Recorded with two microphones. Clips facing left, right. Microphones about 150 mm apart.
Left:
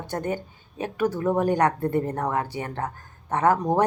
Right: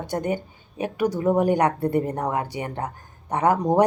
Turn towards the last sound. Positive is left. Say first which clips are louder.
# right 2 dB
turn(degrees=-15)  # may be behind; listen again after turning